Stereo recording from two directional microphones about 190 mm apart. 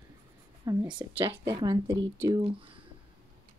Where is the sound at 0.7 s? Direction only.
25° right (ahead or behind).